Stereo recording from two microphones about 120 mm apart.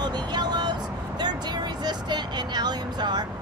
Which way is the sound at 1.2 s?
35° right (ahead or behind).